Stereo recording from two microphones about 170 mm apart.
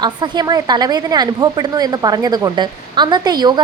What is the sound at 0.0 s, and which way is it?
A woman's voice, 25° right (ahead or behind).